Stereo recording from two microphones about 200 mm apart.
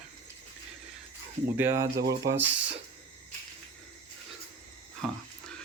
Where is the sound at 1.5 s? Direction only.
10° right (ahead or behind).